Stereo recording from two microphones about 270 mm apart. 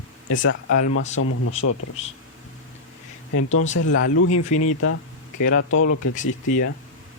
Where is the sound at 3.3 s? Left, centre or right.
Left.